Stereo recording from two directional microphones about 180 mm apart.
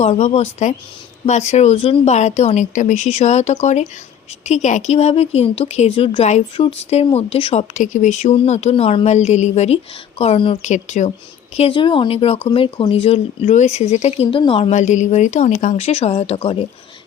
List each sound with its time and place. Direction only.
0.0 s speech: 35° left (ahead or behind)